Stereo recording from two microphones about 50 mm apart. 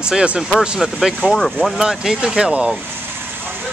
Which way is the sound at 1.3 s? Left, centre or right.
Centre.